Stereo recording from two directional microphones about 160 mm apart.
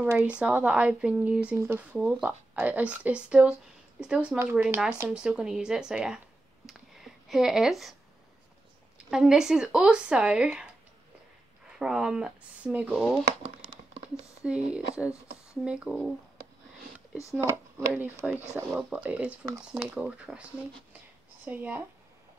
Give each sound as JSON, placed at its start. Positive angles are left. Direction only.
{"t": 0.1, "sound": "speech", "side_deg": -10}
{"t": 8.9, "sound": "speech", "side_deg": -5}
{"t": 11.8, "sound": "speech", "side_deg": -5}
{"t": 13.7, "sound": "a sound", "side_deg": -35}
{"t": 14.4, "sound": "speech", "side_deg": -5}
{"t": 17.4, "sound": "speech", "side_deg": -15}
{"t": 21.5, "sound": "speech", "side_deg": -10}